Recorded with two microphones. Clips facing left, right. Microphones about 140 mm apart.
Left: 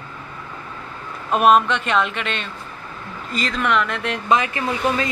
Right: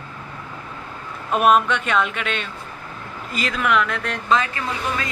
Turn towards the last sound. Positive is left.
turn(degrees=20)  # may be behind; listen again after turning